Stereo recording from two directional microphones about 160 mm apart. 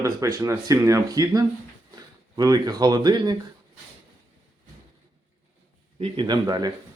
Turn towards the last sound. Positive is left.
turn(degrees=-25)  # may be behind; listen again after turning